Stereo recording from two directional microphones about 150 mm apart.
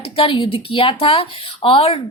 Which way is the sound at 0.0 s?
35° left (ahead or behind).